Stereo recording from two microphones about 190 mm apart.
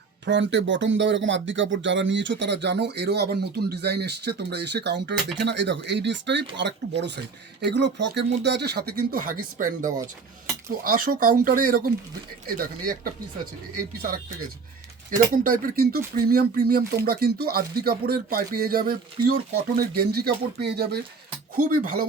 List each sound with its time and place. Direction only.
0.3 s speech: 70° right (ahead or behind); by 13.0 s 50° right (ahead or behind)
15.1 s speech: 45° right (ahead or behind)